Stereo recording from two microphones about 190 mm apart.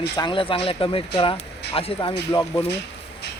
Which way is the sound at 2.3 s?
15° left (ahead or behind).